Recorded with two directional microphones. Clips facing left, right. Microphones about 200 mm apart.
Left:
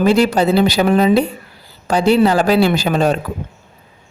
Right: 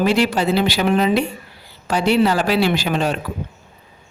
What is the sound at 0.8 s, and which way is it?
Speech, 40° left (ahead or behind).